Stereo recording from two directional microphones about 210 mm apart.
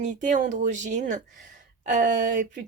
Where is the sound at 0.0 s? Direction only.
35° right (ahead or behind).